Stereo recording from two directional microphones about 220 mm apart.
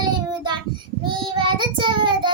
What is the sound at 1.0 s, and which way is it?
Child singing, 20° right (ahead or behind).